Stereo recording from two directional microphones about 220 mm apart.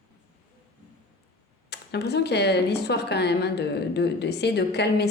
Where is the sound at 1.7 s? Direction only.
50° left (ahead or behind).